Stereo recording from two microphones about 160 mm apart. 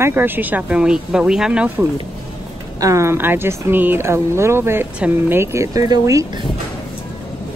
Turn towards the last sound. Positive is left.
turn(degrees=-25)  # may be behind; listen again after turning